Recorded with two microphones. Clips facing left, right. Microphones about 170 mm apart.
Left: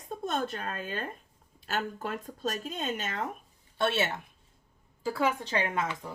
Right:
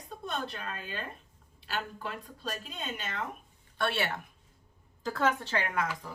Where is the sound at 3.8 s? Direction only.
20° left (ahead or behind).